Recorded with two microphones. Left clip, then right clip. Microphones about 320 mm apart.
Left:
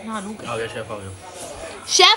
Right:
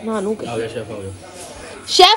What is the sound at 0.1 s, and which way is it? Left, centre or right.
Speech, centre.